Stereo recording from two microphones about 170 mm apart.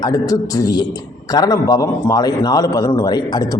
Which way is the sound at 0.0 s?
20° left (ahead or behind).